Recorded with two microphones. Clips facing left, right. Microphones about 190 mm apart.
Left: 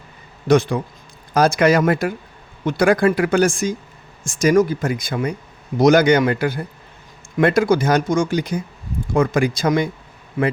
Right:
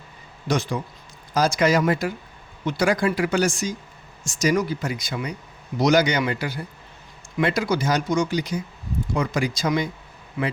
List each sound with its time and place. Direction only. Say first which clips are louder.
0.4 s speech: left 9 dB; 55° left (ahead or behind)